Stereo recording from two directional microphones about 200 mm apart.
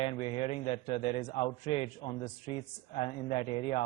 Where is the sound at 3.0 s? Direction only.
30° left (ahead or behind).